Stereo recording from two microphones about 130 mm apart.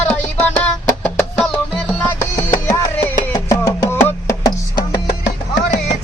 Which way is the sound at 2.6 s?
30° left (ahead or behind).